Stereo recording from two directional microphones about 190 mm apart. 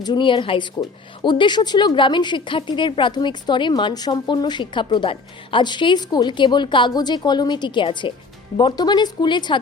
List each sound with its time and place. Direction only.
0.0 s a woman's voice: 25° left (ahead or behind)